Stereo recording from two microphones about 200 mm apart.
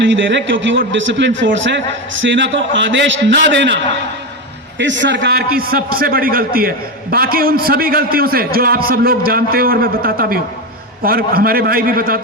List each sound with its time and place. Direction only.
0.0 s a man's voice: 65° right (ahead or behind)
4.8 s a man's voice: 65° right (ahead or behind)
5.4 s a man's voice: 50° right (ahead or behind)